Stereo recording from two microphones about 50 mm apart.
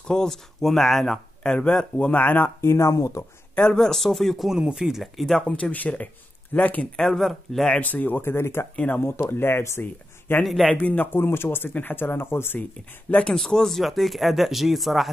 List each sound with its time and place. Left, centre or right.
0.1 s speech: centre; by 2.5 s left
2.6 s speech: left
3.5 s speech: centre
4.7 s speech: centre
5.0 s speech: centre
5.6 s speech: left
7.2 s speech: centre
7.8 s speech: left
8.2 s speech: left
8.7 s speech: left
9.0 s speech: left
10.4 s speech: centre
10.8 s speech: left
13.1 s speech: left; by 15.0 s centre